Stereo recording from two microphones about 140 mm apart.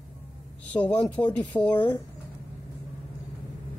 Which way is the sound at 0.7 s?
10° left (ahead or behind).